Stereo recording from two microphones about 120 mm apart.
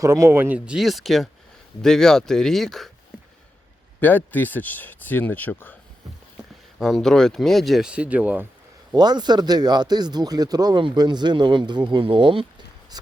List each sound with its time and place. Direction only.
0.0 s speech: 25° right (ahead or behind); by 2.9 s centre (ahead or behind)
4.0 s speech: 15° left (ahead or behind)
6.7 s speech: centre (ahead or behind)
9.0 s speech: 35° right (ahead or behind)
12.9 s a sound: 35° right (ahead or behind)